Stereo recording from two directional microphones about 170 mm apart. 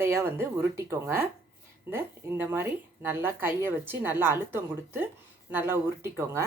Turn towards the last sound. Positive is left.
turn(degrees=-15)  # may be behind; listen again after turning